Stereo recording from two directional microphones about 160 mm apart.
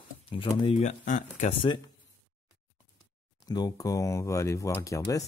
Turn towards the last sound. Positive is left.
turn(degrees=20)  # may be behind; listen again after turning